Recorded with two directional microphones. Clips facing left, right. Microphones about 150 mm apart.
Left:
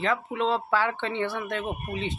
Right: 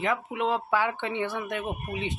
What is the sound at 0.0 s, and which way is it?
Speech, 15° right (ahead or behind).